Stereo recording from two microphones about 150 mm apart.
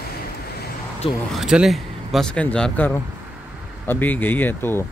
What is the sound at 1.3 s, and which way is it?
Speech, 5° right (ahead or behind).